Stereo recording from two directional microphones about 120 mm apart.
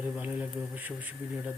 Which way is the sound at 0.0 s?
10° right (ahead or behind).